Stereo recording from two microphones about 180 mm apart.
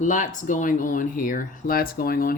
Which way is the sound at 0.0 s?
45° left (ahead or behind).